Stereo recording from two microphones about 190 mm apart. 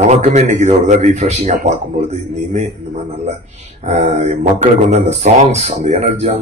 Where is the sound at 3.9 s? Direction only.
35° right (ahead or behind).